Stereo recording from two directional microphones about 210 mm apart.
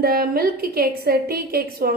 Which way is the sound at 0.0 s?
45° right (ahead or behind).